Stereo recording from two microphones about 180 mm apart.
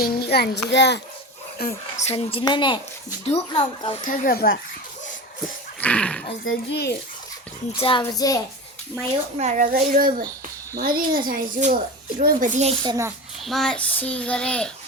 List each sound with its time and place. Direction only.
0.0 s child singing: 60° left (ahead or behind)
1.6 s speech: 55° left (ahead or behind)
2.0 s a woman's voice: 35° left (ahead or behind)
4.0 s speech: 45° left (ahead or behind)
5.8 s a child's voice: 5° left (ahead or behind)
6.4 s child singing: 70° left (ahead or behind)
7.8 s a woman's voice: 30° left (ahead or behind)
8.0 s speech: 20° left (ahead or behind)
9.4 s a child's voice: 40° right (ahead or behind)
9.7 s a child's voice: 55° right (ahead or behind)
12.2 s a child's voice: 40° right (ahead or behind)
12.8 s a child's voice: 20° right (ahead or behind)
13.4 s a child's voice: centre (ahead or behind)